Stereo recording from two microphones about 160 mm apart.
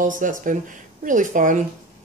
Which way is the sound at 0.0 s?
55° right (ahead or behind).